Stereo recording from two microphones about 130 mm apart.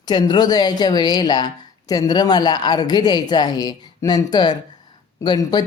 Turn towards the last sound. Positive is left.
turn(degrees=35)  # may be behind; listen again after turning